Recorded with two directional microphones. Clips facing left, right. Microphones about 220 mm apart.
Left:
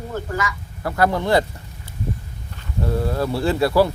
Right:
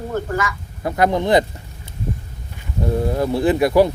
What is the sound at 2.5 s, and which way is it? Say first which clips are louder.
Speech: right 2 dB; 20° right (ahead or behind).